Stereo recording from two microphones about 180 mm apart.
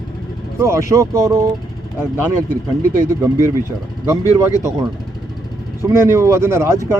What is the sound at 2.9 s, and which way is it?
Speech, 15° right (ahead or behind).